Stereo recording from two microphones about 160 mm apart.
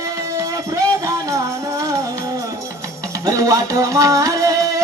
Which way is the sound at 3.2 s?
20° right (ahead or behind).